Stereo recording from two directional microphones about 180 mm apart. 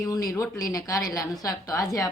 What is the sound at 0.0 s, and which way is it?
A woman's voice, 20° left (ahead or behind).